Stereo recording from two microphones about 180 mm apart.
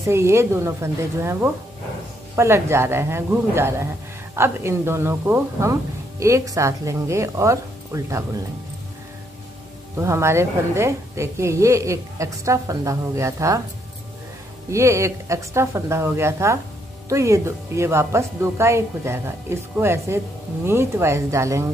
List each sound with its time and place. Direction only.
0.0 s speech: 15° right (ahead or behind)
9.9 s speech: 15° right (ahead or behind)
14.7 s speech: 15° right (ahead or behind)